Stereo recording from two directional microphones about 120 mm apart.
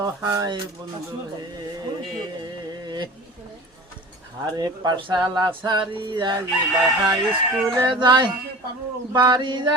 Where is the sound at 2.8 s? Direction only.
35° right (ahead or behind).